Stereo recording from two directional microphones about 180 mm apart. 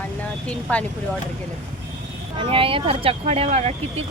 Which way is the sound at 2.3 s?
30° right (ahead or behind).